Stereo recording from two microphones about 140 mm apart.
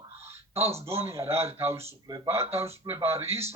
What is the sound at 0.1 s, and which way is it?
Speech, 20° right (ahead or behind).